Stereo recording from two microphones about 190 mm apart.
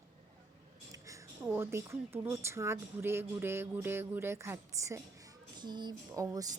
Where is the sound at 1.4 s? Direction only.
10° right (ahead or behind).